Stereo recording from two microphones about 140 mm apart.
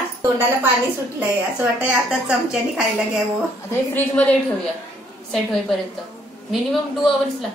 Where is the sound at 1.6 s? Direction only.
10° right (ahead or behind).